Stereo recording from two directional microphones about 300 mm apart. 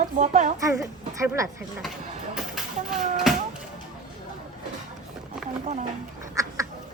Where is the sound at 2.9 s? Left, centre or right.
Right.